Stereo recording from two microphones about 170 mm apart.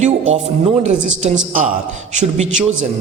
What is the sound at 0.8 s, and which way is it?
Speech, 40° right (ahead or behind).